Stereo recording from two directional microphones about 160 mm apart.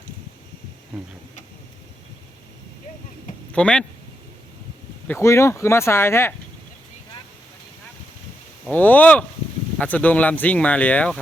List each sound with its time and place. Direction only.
3.5 s speech: 5° left (ahead or behind)
5.0 s speech: 15° left (ahead or behind)
8.7 s speech: 10° left (ahead or behind)